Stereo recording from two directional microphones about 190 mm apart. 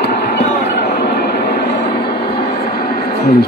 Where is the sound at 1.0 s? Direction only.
60° left (ahead or behind).